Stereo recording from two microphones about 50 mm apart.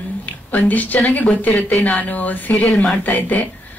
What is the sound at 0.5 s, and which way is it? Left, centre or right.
Speech, left.